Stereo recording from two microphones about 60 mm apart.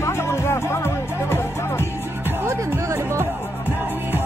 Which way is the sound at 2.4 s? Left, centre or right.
Right.